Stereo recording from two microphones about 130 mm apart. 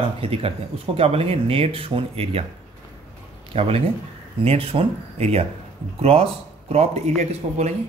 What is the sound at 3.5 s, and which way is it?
Speech, 45° right (ahead or behind).